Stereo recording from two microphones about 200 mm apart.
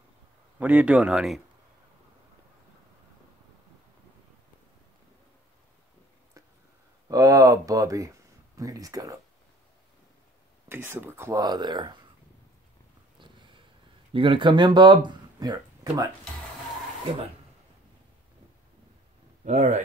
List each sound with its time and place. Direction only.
0.6 s speech: 5° right (ahead or behind)
7.1 s a sound: 20° right (ahead or behind)
10.7 s speech: 10° right (ahead or behind)
13.2 s a sound: 25° right (ahead or behind)
14.1 s speech: 25° right (ahead or behind)
19.4 s speech: 35° right (ahead or behind)